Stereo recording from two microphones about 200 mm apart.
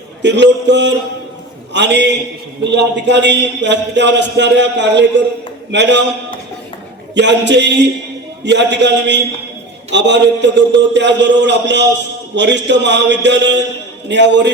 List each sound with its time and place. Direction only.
0.2 s a man's voice: 60° right (ahead or behind)
7.1 s a man's voice: 60° right (ahead or behind)